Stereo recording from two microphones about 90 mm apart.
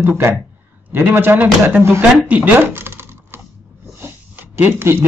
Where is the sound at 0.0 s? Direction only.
30° right (ahead or behind).